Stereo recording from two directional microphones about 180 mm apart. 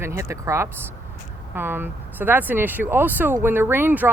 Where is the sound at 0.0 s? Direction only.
15° right (ahead or behind).